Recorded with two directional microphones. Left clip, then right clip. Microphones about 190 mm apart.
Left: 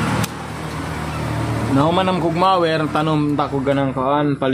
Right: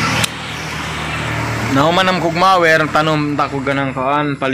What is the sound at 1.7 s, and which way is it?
Speech, 5° left (ahead or behind).